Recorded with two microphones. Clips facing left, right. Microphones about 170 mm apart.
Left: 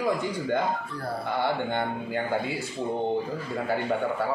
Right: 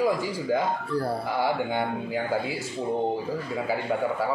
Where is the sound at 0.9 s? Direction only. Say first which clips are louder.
Right 8 dB; 35° right (ahead or behind).